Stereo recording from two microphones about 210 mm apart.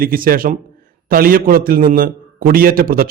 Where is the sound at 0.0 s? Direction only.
45° right (ahead or behind).